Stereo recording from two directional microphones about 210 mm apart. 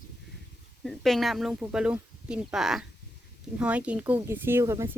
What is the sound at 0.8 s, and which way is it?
Speech, centre (ahead or behind).